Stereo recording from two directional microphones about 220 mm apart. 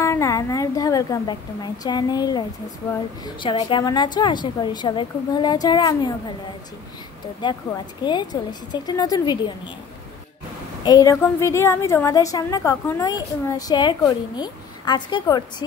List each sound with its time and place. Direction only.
0.0 s a woman's voice: 15° left (ahead or behind)
7.4 s a woman's voice: 20° left (ahead or behind)
10.8 s a woman's voice: 15° left (ahead or behind)